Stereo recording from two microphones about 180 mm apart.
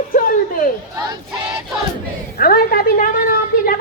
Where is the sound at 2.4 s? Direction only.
55° left (ahead or behind).